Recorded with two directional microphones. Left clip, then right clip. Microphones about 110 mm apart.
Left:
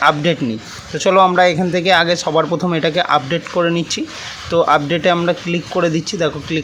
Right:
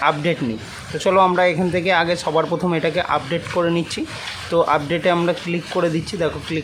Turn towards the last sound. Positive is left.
turn(degrees=25)  # may be behind; listen again after turning